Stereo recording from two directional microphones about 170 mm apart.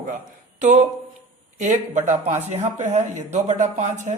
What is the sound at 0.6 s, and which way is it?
Speech, 45° right (ahead or behind).